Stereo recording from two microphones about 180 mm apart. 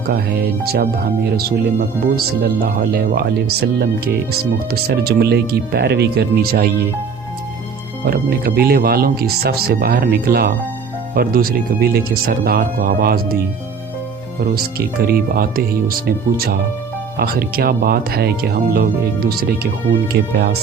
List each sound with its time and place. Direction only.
0.1 s speech: 60° right (ahead or behind)
8.0 s speech: 60° right (ahead or behind)
14.5 s speech: 55° right (ahead or behind)